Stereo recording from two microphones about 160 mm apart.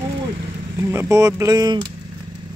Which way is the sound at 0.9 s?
15° right (ahead or behind).